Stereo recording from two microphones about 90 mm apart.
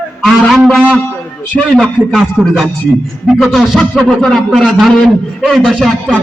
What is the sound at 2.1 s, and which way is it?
Music, 5° right (ahead or behind).